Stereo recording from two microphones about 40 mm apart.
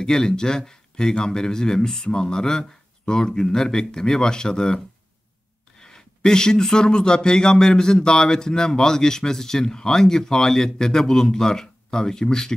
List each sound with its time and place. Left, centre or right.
0.0 s speech: centre